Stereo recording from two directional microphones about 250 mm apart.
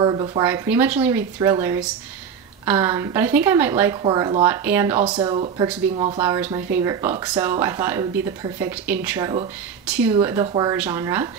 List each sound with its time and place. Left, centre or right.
0.0 s speech: centre
0.5 s speech: centre
5.0 s speech: centre